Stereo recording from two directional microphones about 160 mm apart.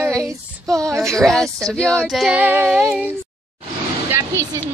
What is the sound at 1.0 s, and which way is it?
Speech, 5° left (ahead or behind).